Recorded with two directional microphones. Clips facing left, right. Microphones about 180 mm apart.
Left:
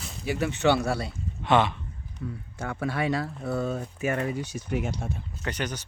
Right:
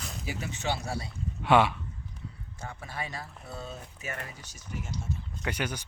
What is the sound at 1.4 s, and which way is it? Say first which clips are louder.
Speech: even; 10° right (ahead or behind).